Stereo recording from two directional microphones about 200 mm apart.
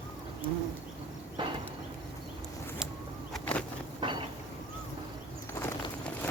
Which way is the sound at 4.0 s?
25° right (ahead or behind).